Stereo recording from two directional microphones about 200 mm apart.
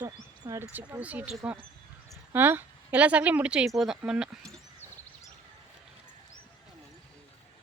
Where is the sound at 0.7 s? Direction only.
10° right (ahead or behind).